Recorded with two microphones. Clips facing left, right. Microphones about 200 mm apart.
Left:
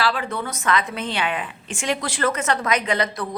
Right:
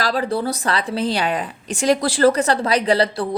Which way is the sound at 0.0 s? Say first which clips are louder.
Right 4 dB; 35° right (ahead or behind).